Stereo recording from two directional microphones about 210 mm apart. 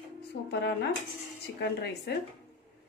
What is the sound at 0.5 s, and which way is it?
Speech, 50° left (ahead or behind).